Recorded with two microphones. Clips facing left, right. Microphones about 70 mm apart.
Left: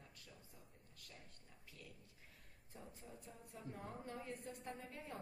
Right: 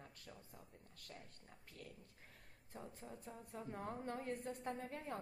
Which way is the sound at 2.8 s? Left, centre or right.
Right.